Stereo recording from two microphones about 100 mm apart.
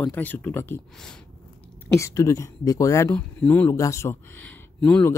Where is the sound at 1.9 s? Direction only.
30° left (ahead or behind).